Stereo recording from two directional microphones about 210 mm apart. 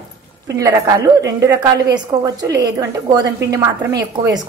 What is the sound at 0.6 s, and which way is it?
A woman's voice, 15° right (ahead or behind).